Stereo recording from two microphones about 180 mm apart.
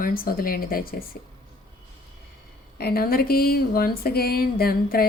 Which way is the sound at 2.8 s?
60° left (ahead or behind).